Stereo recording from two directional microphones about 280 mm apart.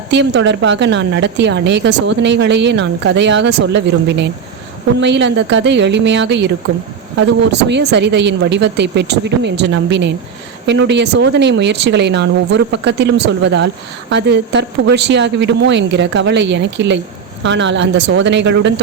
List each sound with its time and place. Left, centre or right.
0.1 s a woman's voice: right
7.7 s a woman's voice: right